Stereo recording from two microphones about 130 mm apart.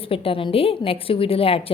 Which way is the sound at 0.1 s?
45° left (ahead or behind).